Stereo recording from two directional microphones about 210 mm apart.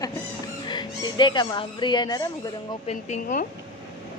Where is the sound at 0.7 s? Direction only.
20° left (ahead or behind).